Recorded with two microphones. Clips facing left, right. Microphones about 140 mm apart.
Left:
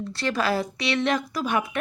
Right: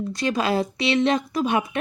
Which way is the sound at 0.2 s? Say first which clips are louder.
Right 2 dB; 20° right (ahead or behind).